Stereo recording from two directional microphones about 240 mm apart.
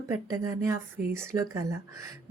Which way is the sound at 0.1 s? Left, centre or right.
Centre.